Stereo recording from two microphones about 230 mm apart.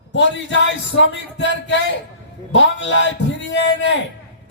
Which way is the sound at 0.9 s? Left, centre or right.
Left.